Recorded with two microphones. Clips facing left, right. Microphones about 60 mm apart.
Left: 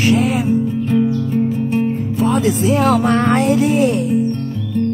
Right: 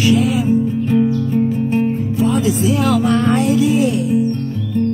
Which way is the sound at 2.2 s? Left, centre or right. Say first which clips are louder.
Left 1 dB; left.